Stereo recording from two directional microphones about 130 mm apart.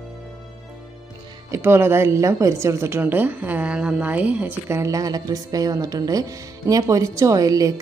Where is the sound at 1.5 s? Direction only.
20° right (ahead or behind).